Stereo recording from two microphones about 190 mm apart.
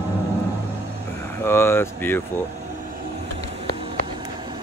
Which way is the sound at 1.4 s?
10° left (ahead or behind).